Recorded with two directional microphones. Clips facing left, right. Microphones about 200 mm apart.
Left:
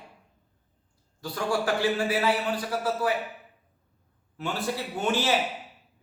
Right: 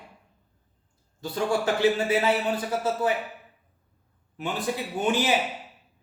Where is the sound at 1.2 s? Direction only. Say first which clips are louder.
Right 2 dB; 25° right (ahead or behind).